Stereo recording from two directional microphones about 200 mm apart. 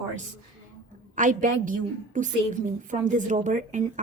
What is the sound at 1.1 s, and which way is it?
A woman's voice, 40° right (ahead or behind).